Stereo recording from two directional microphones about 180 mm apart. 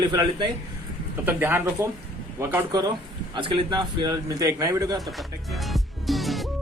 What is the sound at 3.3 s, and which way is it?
A man's voice, 30° right (ahead or behind).